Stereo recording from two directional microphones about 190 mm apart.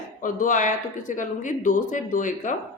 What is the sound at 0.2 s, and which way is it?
Speech, 45° left (ahead or behind).